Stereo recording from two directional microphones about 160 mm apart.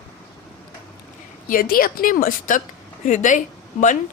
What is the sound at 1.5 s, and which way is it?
Speech, 65° left (ahead or behind).